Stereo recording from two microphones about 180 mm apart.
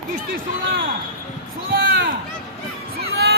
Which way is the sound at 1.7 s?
65° right (ahead or behind).